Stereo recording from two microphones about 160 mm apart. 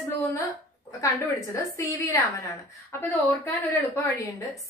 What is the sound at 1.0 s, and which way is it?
A woman's voice, 20° left (ahead or behind).